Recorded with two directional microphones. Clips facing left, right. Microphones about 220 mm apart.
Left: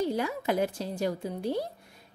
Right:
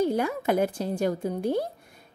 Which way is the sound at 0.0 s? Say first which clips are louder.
Right 4 dB; 50° right (ahead or behind).